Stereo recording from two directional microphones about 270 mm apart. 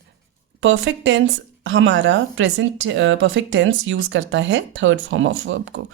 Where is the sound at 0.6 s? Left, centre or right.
Right.